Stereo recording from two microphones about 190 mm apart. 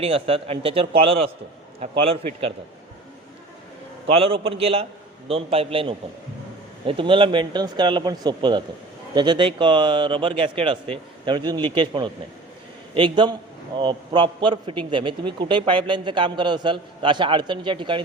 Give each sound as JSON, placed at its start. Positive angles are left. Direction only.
{"t": 0.0, "sound": "a man's voice", "side_deg": -30}
{"t": 4.0, "sound": "a man's voice", "side_deg": -30}